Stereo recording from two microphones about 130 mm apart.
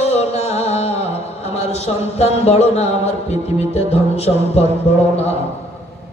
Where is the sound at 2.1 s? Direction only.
55° left (ahead or behind).